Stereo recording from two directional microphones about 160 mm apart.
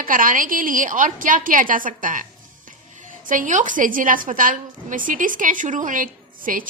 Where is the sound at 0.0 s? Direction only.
60° right (ahead or behind).